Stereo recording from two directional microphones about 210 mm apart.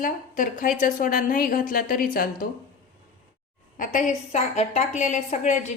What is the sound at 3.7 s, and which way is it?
A woman's voice, 40° left (ahead or behind).